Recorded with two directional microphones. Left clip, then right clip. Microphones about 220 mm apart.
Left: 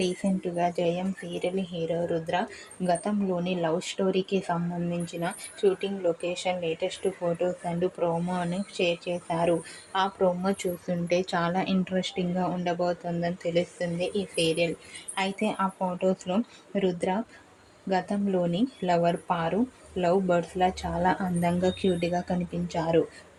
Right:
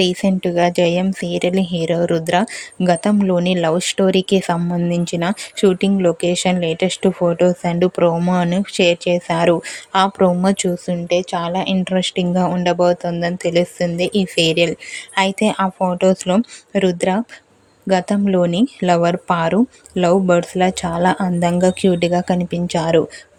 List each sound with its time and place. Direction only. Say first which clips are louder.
0.0 s speech: right 12 dB; 40° right (ahead or behind)
11.1 s speech: right 8 dB; 20° right (ahead or behind); by 23.0 s 40° right (ahead or behind)